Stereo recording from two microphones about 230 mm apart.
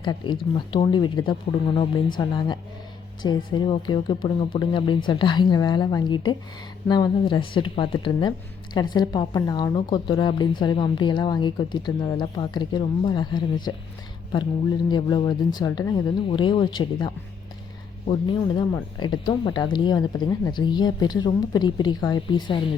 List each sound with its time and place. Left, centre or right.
0.0 s speech: centre
14.8 s speech: centre